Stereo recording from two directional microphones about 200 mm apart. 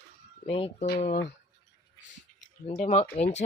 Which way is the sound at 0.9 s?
45° left (ahead or behind).